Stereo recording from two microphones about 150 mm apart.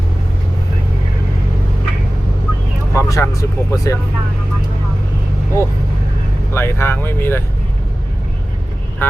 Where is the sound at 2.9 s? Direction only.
20° left (ahead or behind).